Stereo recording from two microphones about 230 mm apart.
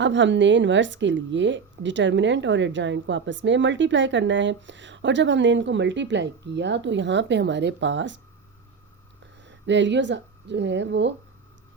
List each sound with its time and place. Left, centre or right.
0.0 s a woman's voice: right
9.2 s speech: right